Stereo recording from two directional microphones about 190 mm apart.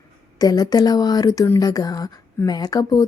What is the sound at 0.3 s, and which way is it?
Speech, 20° left (ahead or behind).